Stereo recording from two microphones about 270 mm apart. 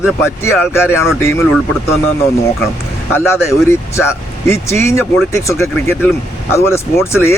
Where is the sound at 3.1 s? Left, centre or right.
Centre.